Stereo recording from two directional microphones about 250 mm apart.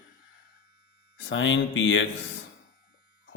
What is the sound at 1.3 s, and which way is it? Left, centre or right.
Speech, left.